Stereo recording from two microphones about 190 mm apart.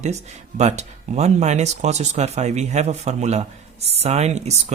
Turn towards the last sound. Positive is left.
turn(degrees=-35)  # may be behind; listen again after turning